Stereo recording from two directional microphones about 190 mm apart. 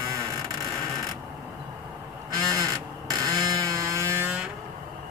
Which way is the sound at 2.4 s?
20° right (ahead or behind).